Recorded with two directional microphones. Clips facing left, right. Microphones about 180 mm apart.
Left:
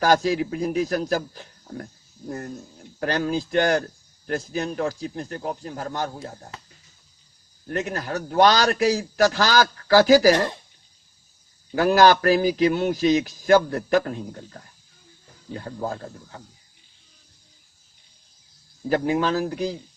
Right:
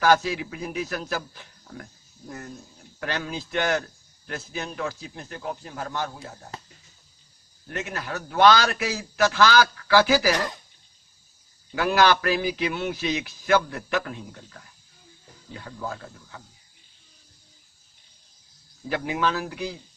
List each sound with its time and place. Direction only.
0.0 s a man's voice: 40° left (ahead or behind)
3.0 s a man's voice: 40° left (ahead or behind)
6.5 s speech: 35° right (ahead or behind)
7.7 s a man's voice: 40° left (ahead or behind)
10.3 s speech: 25° left (ahead or behind)
11.7 s a man's voice: 40° left (ahead or behind)
18.9 s a man's voice: 40° left (ahead or behind)